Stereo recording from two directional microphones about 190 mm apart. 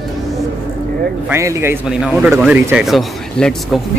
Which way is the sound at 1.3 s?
15° right (ahead or behind).